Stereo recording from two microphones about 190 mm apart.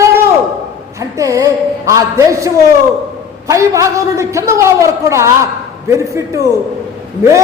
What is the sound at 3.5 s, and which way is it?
A man's voice, 15° right (ahead or behind).